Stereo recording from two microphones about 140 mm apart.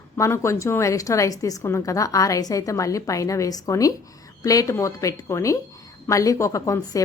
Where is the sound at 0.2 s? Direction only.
20° left (ahead or behind).